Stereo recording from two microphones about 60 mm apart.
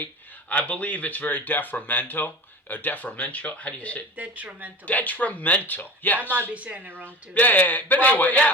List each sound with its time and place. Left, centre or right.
0.0 s speech: left
4.2 s speech: right
4.9 s speech: left
6.5 s speech: right
7.3 s a man's voice: left